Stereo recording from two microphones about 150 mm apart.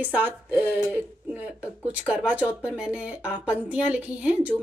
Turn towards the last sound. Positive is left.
turn(degrees=-10)  # may be behind; listen again after turning